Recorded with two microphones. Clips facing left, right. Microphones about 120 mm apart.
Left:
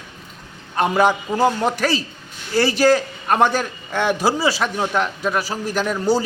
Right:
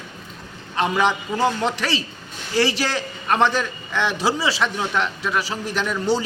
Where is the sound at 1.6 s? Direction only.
45° left (ahead or behind).